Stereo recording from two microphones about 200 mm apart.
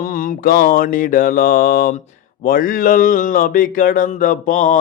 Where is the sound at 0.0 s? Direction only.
45° left (ahead or behind).